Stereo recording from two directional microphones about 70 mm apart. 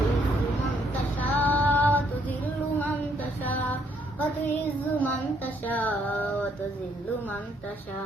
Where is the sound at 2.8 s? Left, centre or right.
Left.